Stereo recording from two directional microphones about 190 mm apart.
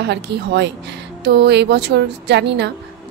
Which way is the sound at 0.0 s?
65° right (ahead or behind).